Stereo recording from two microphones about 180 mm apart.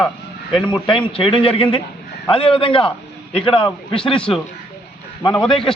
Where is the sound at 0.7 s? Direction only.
30° left (ahead or behind).